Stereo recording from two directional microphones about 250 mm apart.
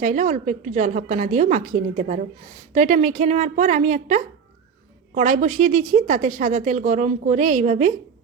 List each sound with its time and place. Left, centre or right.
0.0 s a woman's voice: right